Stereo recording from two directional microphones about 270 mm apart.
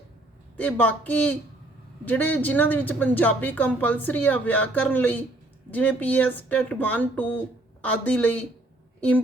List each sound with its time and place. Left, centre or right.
0.5 s a woman's voice: centre